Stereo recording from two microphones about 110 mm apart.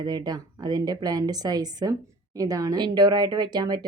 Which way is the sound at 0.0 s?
40° right (ahead or behind).